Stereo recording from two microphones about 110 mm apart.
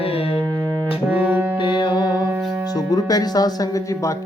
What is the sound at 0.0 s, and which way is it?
Music, 60° left (ahead or behind).